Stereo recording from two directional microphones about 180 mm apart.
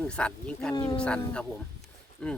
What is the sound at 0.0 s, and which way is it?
Speech, 5° left (ahead or behind).